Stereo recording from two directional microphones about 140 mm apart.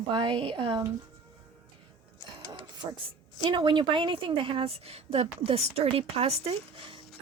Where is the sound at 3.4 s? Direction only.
35° right (ahead or behind).